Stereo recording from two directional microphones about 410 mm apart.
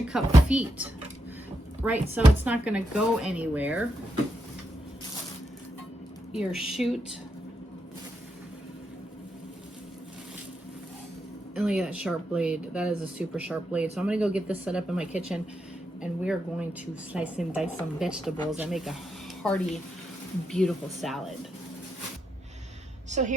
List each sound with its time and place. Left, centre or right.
0.1 s speech: centre
6.3 s speech: centre
11.5 s speech: centre
23.0 s a sound: centre